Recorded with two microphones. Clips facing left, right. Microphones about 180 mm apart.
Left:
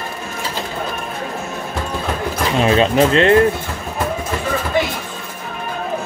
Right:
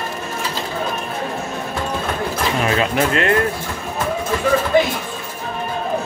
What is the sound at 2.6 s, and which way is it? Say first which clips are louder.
Speech: left 6 dB; 25° left (ahead or behind).